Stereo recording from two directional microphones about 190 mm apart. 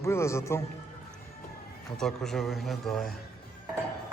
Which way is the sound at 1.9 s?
Centre (ahead or behind).